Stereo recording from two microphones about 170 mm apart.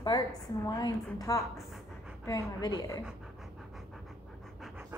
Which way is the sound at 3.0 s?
Centre (ahead or behind).